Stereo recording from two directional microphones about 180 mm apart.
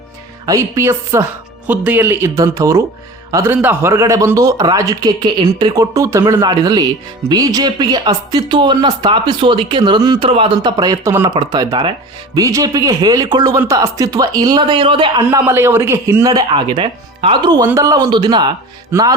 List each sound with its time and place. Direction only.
0.4 s speech: 15° right (ahead or behind)
15.3 s speech: 15° right (ahead or behind)